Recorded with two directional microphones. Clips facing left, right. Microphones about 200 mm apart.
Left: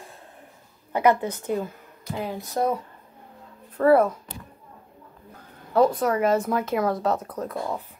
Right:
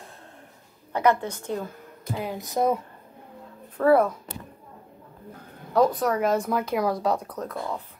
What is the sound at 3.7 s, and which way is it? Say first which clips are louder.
Speech: left 1 dB; centre (ahead or behind).